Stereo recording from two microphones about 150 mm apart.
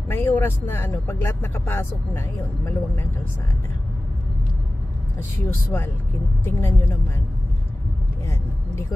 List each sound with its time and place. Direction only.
0.1 s speech: 15° left (ahead or behind)
5.7 s speech: 15° left (ahead or behind)
8.3 s speech: 15° left (ahead or behind)